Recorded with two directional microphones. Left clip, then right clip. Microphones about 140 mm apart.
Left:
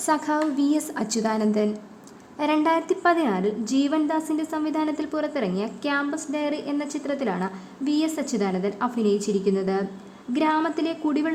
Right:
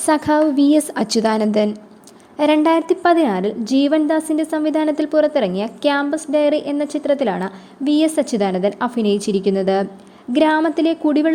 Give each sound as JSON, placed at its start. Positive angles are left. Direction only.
{"t": 0.0, "sound": "a woman's voice", "side_deg": -35}